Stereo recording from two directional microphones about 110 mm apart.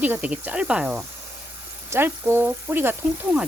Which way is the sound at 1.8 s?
20° right (ahead or behind).